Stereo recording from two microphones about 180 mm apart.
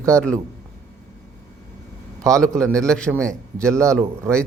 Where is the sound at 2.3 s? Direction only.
5° left (ahead or behind).